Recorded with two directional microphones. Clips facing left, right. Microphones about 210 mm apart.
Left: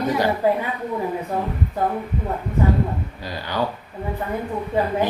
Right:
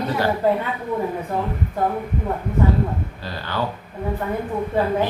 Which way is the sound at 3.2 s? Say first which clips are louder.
Left 1 dB; 15° left (ahead or behind).